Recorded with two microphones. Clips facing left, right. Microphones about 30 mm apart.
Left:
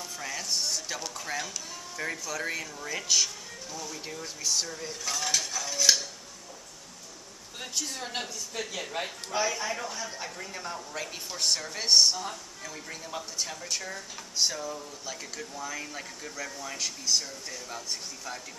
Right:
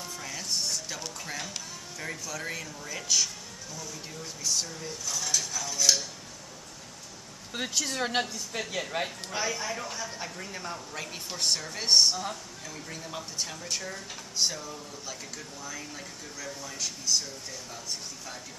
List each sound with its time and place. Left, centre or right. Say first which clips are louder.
0.2 s music: left 2 dB; centre
2.0 s speech: left 3 dB; centre
5.1 s stir: left 1 dB; left
5.5 s stir: left 1 dB; centre
7.5 s speech: right 4 dB; right
8.2 s a man's voice: right 4 dB; centre
9.5 s speech: left 1 dB; centre
13.0 s speech: left 1 dB; centre
15.8 s speech: left 2 dB; centre